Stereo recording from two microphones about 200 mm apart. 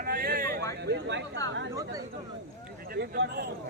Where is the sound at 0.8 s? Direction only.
60° right (ahead or behind).